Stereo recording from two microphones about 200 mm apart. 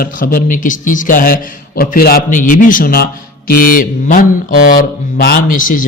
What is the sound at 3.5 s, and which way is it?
Mantra, 45° left (ahead or behind).